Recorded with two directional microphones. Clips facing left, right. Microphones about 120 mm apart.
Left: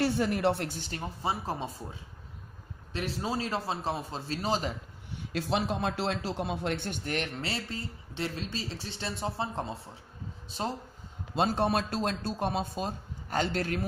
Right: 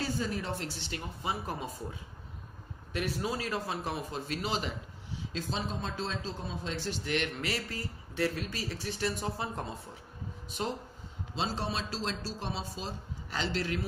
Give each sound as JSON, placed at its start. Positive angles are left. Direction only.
{"t": 0.0, "sound": "a man's voice", "side_deg": 65}
{"t": 2.9, "sound": "speech", "side_deg": 30}
{"t": 5.1, "sound": "a man's voice", "side_deg": 65}
{"t": 7.4, "sound": "speech", "side_deg": 30}
{"t": 11.3, "sound": "a man's voice", "side_deg": 55}